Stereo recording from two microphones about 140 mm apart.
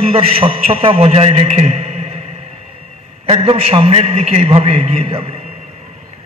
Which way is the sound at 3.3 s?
45° right (ahead or behind).